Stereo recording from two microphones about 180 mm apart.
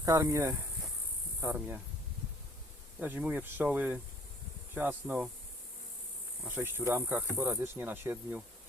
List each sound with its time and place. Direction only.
0.0 s speech: 20° right (ahead or behind)
3.0 s speech: 10° right (ahead or behind)
6.4 s speech: 10° right (ahead or behind)